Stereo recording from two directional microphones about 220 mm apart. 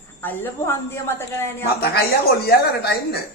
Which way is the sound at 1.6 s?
45° left (ahead or behind).